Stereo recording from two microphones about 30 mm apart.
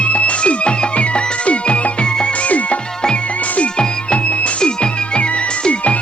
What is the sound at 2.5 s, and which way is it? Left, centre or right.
Music, left.